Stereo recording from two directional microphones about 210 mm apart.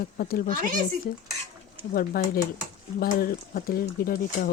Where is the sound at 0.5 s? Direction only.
40° right (ahead or behind).